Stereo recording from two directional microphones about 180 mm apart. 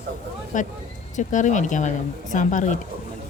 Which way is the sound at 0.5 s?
45° left (ahead or behind).